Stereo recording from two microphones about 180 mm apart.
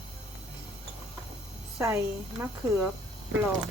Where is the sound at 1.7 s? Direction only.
15° right (ahead or behind).